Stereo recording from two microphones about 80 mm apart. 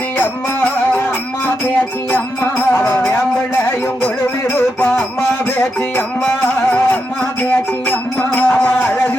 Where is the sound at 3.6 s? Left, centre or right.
Left.